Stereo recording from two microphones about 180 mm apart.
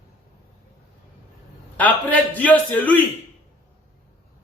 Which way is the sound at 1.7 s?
10° left (ahead or behind).